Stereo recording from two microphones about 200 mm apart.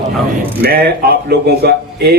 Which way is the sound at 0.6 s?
50° right (ahead or behind).